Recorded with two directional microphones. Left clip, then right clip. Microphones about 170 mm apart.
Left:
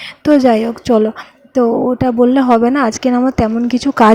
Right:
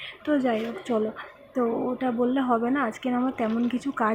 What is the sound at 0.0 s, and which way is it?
Speech, 75° left (ahead or behind).